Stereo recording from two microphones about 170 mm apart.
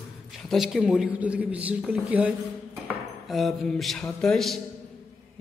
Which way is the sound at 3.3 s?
Centre (ahead or behind).